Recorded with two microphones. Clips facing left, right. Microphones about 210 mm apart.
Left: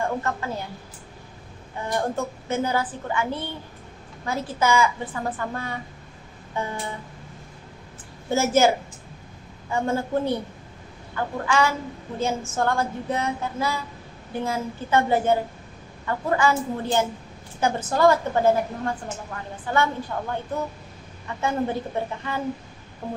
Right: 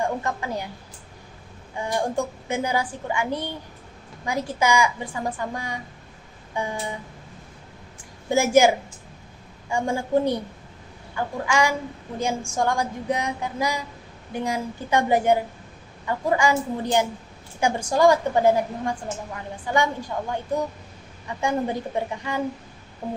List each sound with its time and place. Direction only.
0.2 s a child's voice: 15° right (ahead or behind)
1.8 s a child's voice: 15° right (ahead or behind)
6.5 s a sound: 15° right (ahead or behind)
8.3 s a child's voice: 15° right (ahead or behind)